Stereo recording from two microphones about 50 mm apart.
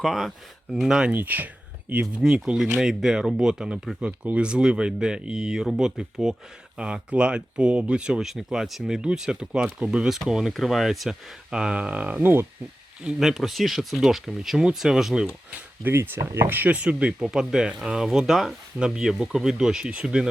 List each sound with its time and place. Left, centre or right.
0.0 s speech: centre
0.7 s speech: centre
1.1 s speech: right
1.9 s speech: right
2.8 s speech: centre
8.2 s speech: centre
10.5 s speech: centre
11.5 s speech: right
12.2 s speech: right
13.1 s speech: centre
15.9 s speech: right
16.6 s speech: right
17.2 s speech: centre